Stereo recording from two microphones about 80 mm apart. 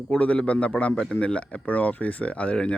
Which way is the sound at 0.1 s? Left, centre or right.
Centre.